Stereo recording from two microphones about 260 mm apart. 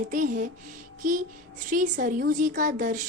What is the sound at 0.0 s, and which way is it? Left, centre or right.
A woman's voice, right.